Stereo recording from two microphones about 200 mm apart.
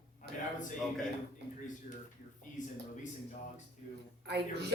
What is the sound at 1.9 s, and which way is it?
Speech, 40° left (ahead or behind).